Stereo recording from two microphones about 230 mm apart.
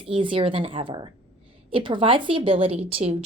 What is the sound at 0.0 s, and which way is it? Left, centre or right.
A woman's voice, right.